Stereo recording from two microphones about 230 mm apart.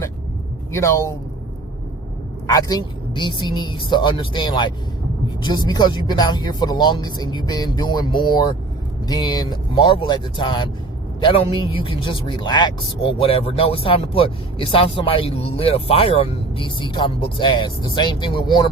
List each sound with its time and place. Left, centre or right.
0.7 s speech: centre
2.5 s speech: centre